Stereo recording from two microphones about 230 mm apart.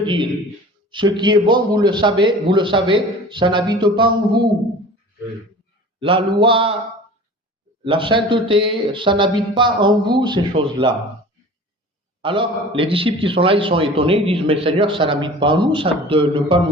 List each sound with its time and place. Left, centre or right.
0.0 s a man's voice: centre
6.0 s a man's voice: right
7.9 s a man's voice: right
12.2 s a man's voice: right